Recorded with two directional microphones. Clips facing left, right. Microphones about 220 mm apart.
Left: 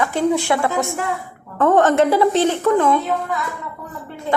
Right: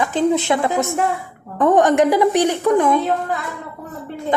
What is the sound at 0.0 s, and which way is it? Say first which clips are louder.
A woman's voice: right 1 dB; 20° right (ahead or behind).